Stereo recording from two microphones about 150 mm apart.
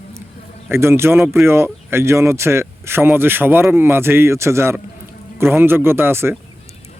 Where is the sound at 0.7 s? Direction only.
15° right (ahead or behind).